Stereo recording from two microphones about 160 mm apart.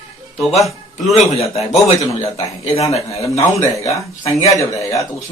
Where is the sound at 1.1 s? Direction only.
40° left (ahead or behind).